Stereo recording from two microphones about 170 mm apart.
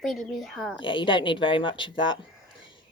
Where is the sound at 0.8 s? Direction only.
30° left (ahead or behind).